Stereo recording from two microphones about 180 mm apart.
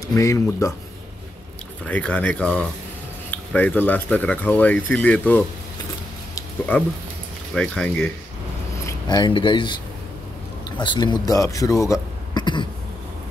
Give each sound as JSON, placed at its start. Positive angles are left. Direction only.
{"t": 0.1, "sound": "speech", "side_deg": 20}
{"t": 1.9, "sound": "speech", "side_deg": 5}
{"t": 6.3, "sound": "a sound", "side_deg": 10}
{"t": 7.5, "sound": "speech", "side_deg": 5}
{"t": 8.8, "sound": "speech", "side_deg": 25}
{"t": 10.8, "sound": "speech", "side_deg": 25}
{"t": 11.8, "sound": "a sound", "side_deg": 20}